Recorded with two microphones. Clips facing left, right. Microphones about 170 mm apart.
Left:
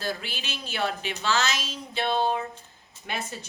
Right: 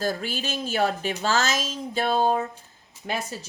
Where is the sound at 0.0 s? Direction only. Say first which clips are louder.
Right 5 dB; 45° right (ahead or behind).